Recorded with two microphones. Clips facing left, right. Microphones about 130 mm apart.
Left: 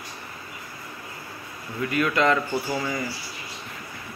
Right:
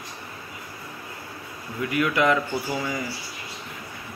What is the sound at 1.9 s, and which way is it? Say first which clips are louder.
A man's voice: even; 15° right (ahead or behind).